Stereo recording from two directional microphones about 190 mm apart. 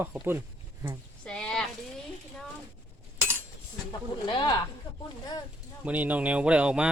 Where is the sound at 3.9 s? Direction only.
25° left (ahead or behind).